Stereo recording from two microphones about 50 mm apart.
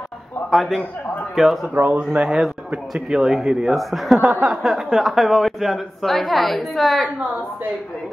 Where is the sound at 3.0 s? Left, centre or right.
Centre.